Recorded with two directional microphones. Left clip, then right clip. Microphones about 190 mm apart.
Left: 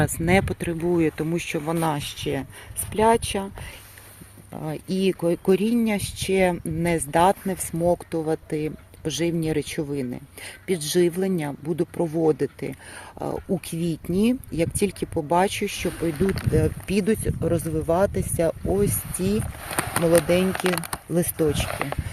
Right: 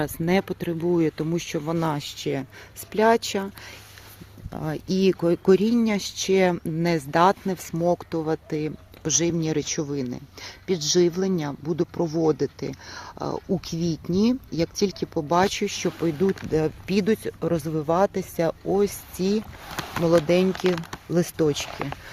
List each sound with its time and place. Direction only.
0.0 s speech: centre (ahead or behind)
4.5 s speech: 10° right (ahead or behind)
16.2 s speech: 40° left (ahead or behind)
16.5 s speech: centre (ahead or behind)
20.5 s speech: 50° left (ahead or behind)
21.1 s speech: 5° right (ahead or behind)
21.8 s speech: 45° left (ahead or behind)